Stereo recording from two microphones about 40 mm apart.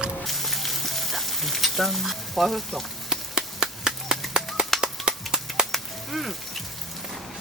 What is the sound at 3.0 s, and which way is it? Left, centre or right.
Chop, centre.